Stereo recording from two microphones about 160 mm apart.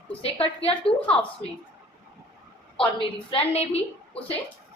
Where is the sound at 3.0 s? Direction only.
35° left (ahead or behind).